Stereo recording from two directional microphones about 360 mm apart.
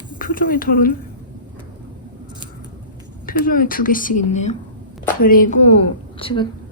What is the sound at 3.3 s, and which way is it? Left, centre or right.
A woman's voice, left.